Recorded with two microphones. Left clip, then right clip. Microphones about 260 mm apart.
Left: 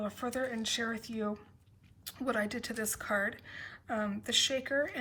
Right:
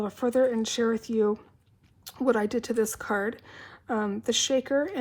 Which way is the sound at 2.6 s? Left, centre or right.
Centre.